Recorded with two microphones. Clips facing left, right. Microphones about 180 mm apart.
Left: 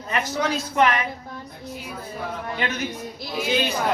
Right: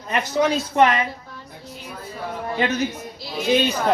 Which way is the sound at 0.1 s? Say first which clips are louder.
Right 4 dB; 25° right (ahead or behind).